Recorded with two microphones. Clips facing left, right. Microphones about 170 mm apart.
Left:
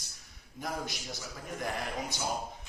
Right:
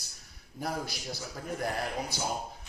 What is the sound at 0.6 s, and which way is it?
Speech, 35° right (ahead or behind).